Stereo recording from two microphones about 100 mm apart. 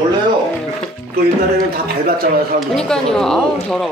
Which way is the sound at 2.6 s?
5° left (ahead or behind).